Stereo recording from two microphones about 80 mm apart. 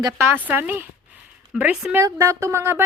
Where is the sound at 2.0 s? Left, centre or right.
Right.